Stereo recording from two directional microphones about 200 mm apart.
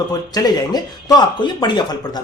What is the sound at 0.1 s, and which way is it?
Speech, 20° left (ahead or behind).